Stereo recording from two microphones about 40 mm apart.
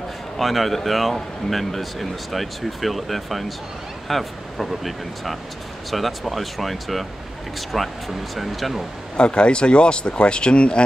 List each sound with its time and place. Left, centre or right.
0.4 s speech: centre
9.1 s speech: left